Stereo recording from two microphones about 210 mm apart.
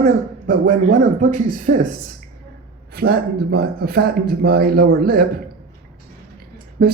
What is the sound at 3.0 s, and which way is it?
Speech, 45° right (ahead or behind).